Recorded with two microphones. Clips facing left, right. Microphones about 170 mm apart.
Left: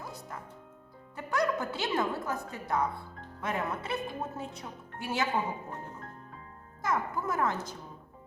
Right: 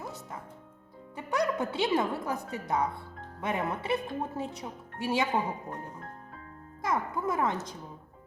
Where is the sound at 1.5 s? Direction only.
25° right (ahead or behind).